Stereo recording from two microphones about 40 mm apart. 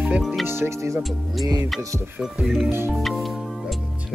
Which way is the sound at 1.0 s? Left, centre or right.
Centre.